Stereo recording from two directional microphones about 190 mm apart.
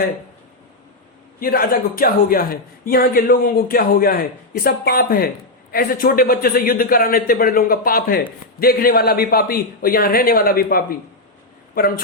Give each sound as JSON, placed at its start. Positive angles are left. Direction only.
{"t": 1.4, "sound": "a man's voice", "side_deg": 50}